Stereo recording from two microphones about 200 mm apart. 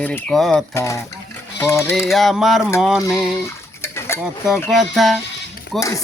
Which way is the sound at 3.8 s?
10° left (ahead or behind).